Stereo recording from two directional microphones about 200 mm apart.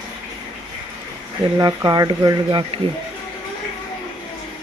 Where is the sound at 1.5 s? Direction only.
20° right (ahead or behind).